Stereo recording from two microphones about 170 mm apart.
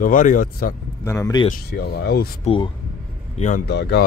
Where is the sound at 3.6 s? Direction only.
75° left (ahead or behind).